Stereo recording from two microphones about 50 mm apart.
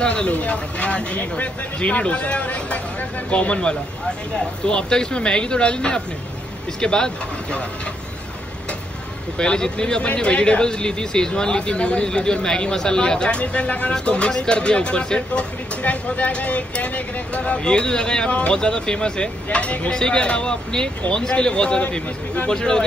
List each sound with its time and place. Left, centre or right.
0.0 s speech: left
9.4 s speech: centre
22.5 s speech: centre